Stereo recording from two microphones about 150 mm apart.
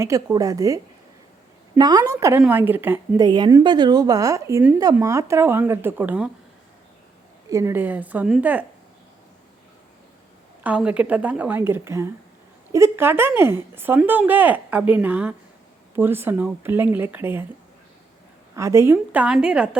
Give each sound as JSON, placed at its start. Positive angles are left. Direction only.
{"t": 0.0, "sound": "a woman's voice", "side_deg": -20}
{"t": 1.8, "sound": "a woman's voice", "side_deg": -25}
{"t": 3.2, "sound": "a woman's voice", "side_deg": -30}
{"t": 7.5, "sound": "speech", "side_deg": -15}
{"t": 10.6, "sound": "speech", "side_deg": -10}
{"t": 18.5, "sound": "speech", "side_deg": -20}